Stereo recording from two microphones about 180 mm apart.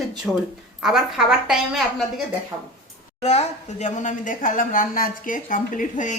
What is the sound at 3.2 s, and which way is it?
A woman's voice, 40° left (ahead or behind).